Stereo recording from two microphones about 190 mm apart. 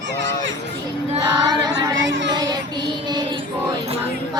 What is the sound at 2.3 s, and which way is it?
Child singing, 20° right (ahead or behind).